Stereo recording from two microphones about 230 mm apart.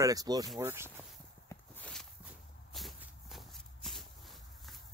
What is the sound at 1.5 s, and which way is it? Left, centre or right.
Walk, centre.